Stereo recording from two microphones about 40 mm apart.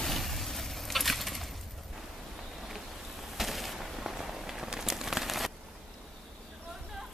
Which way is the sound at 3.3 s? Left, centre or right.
Centre.